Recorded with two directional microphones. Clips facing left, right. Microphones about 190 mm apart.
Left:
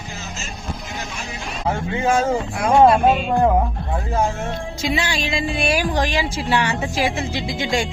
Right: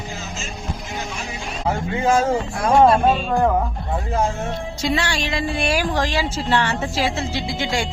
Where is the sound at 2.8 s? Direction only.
15° left (ahead or behind).